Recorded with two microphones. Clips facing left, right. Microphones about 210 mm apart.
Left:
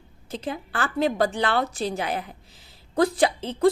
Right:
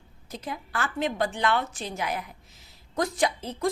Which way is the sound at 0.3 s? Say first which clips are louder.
Left 5 dB; 30° left (ahead or behind).